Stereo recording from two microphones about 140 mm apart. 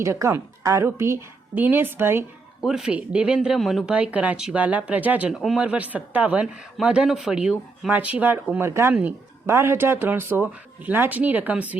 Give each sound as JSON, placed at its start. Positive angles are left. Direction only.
{"t": 0.0, "sound": "speech", "side_deg": -20}
{"t": 2.6, "sound": "speech", "side_deg": -5}